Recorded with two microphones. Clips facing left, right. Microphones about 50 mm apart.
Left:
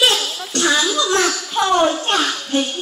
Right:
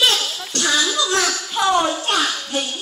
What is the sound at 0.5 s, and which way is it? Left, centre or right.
Speech, left.